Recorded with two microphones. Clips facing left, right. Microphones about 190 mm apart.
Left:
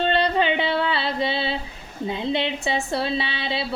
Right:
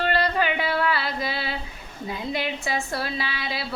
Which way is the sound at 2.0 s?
25° left (ahead or behind).